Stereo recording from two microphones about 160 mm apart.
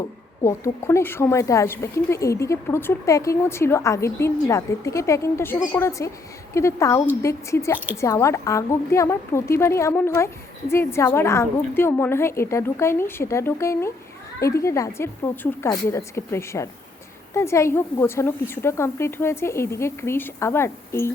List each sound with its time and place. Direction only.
0.0 s a woman's voice: 20° left (ahead or behind)